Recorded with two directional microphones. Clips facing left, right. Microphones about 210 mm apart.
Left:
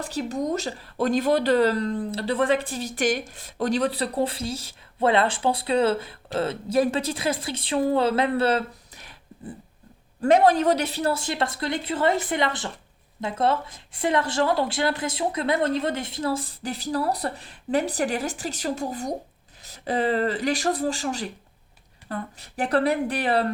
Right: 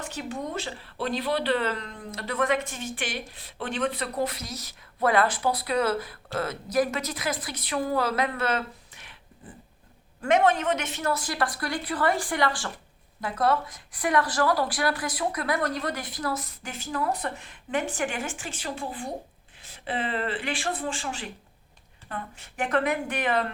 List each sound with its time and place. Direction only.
0.0 s speech: 35° left (ahead or behind)
10.2 s speech: 35° left (ahead or behind)